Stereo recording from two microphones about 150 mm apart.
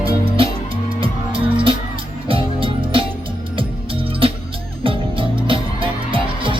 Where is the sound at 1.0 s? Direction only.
35° right (ahead or behind).